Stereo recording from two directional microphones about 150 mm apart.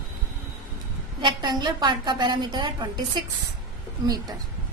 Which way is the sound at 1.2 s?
30° right (ahead or behind).